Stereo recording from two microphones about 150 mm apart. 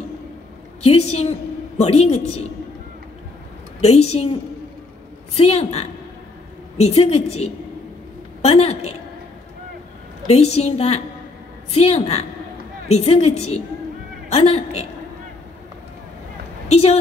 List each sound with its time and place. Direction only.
0.8 s a woman's voice: 45° left (ahead or behind)
3.8 s a woman's voice: 45° left (ahead or behind)
8.4 s a woman's voice: 40° left (ahead or behind)
10.2 s a woman's voice: 45° left (ahead or behind)
16.6 s a woman's voice: 45° left (ahead or behind)